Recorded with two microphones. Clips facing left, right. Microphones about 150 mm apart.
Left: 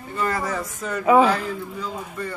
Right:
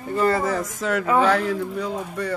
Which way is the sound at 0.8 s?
90° right.